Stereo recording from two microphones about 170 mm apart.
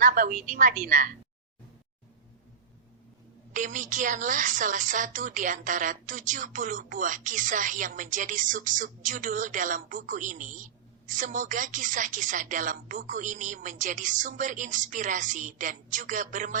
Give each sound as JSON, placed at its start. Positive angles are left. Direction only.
{"t": 0.0, "sound": "a woman's voice", "side_deg": -55}
{"t": 3.5, "sound": "a woman's voice", "side_deg": -50}